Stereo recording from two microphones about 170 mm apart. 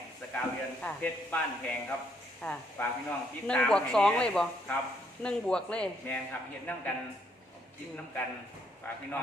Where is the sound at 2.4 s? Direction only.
5° left (ahead or behind).